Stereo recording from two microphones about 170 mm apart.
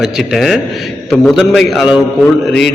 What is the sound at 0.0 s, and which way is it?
A man's voice, centre (ahead or behind).